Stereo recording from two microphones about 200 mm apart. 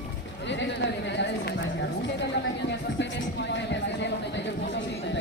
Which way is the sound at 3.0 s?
60° left (ahead or behind).